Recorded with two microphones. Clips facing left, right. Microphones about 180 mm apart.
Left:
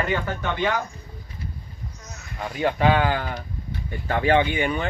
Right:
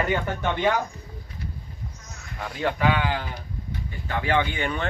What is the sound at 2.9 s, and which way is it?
Speech, 45° left (ahead or behind).